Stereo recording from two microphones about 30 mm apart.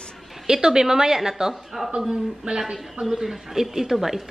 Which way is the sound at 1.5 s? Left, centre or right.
Centre.